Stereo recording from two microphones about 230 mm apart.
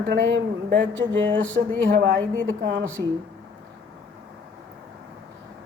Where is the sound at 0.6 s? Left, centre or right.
Right.